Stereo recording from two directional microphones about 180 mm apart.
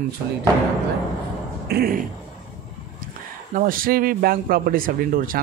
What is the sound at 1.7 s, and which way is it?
Speech, 55° right (ahead or behind).